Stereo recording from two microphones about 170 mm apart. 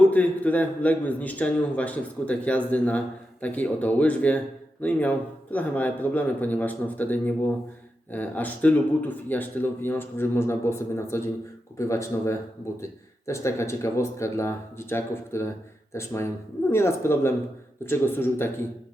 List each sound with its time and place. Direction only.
0.1 s speech: 10° left (ahead or behind)